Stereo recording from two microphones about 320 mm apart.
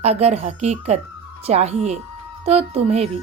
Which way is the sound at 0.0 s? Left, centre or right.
Centre.